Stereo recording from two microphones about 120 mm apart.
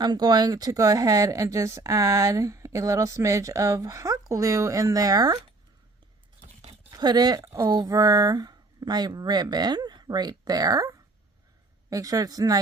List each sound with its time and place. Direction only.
0.0 s speech: 35° right (ahead or behind)
6.4 s a sound: 55° right (ahead or behind)
6.9 s speech: 35° right (ahead or behind)